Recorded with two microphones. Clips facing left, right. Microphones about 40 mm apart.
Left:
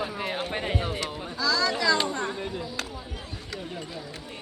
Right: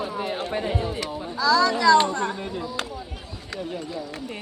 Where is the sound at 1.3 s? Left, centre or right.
Centre.